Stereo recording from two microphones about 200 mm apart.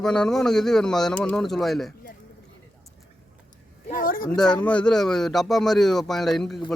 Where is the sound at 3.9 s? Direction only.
45° left (ahead or behind).